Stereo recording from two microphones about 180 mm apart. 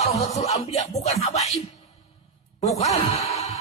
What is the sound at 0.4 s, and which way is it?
Speech, 35° left (ahead or behind).